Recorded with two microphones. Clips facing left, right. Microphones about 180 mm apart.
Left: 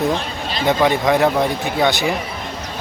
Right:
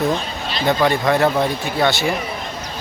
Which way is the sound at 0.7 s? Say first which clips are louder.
Left 1 dB; 20° left (ahead or behind).